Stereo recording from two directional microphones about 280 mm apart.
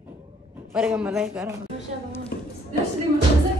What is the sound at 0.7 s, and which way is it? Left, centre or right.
Speech, centre.